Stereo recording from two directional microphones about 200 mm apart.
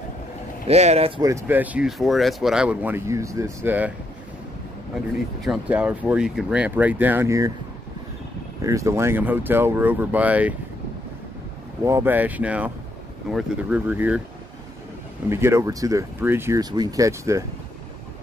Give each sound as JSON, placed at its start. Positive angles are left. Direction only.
{"t": 0.7, "sound": "speech", "side_deg": -30}
{"t": 1.2, "sound": "speech", "side_deg": -10}
{"t": 5.4, "sound": "speech", "side_deg": -5}
{"t": 8.6, "sound": "speech", "side_deg": -15}
{"t": 11.8, "sound": "speech", "side_deg": -15}
{"t": 15.2, "sound": "speech", "side_deg": -15}